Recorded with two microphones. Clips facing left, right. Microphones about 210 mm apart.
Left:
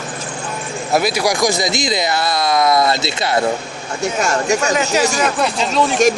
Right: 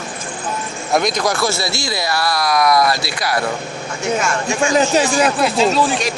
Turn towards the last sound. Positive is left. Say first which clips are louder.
# right 2 dB
turn(degrees=0)  # may be behind; listen again after turning